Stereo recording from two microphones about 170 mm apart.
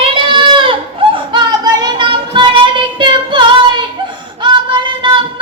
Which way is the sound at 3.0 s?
30° right (ahead or behind).